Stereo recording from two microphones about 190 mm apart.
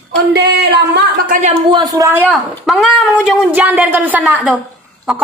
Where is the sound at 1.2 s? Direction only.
45° right (ahead or behind).